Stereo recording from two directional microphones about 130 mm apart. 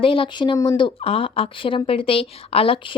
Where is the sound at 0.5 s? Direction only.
25° left (ahead or behind).